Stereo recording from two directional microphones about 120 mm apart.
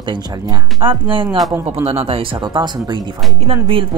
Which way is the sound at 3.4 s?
50° right (ahead or behind).